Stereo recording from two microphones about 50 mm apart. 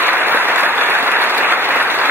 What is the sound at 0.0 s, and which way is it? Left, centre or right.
Applause, right.